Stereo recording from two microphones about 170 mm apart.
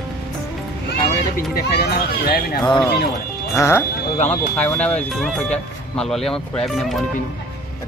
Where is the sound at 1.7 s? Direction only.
65° left (ahead or behind).